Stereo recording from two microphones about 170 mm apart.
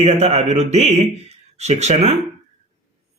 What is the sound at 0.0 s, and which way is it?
A man's voice, 40° right (ahead or behind).